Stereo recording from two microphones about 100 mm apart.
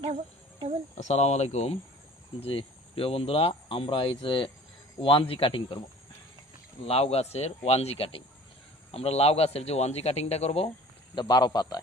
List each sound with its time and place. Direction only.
1.1 s a man's voice: 90° left
2.4 s a man's voice: 65° left (ahead or behind)
6.8 s speech: 80° left
8.9 s a man's voice: 90° left
11.1 s a man's voice: 45° left (ahead or behind)